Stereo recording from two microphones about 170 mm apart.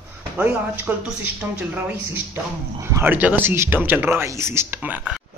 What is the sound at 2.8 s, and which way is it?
Speech, 15° right (ahead or behind).